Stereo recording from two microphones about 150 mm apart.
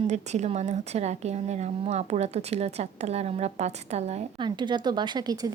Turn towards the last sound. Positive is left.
turn(degrees=-25)  # may be behind; listen again after turning